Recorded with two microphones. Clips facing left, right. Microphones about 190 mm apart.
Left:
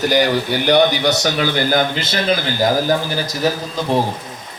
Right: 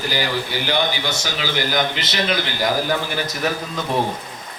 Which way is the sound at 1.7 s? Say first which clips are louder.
Left 4 dB; 40° left (ahead or behind).